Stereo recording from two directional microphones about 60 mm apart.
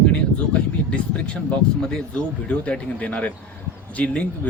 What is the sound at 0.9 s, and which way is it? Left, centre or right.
Speech, centre.